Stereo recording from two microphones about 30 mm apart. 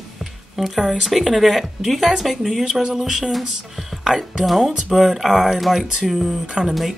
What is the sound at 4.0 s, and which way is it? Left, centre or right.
Music, centre.